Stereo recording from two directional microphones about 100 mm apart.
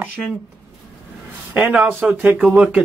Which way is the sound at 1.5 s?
10° right (ahead or behind).